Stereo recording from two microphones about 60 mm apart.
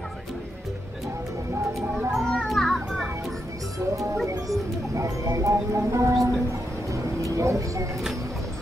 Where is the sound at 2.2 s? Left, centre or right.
Centre.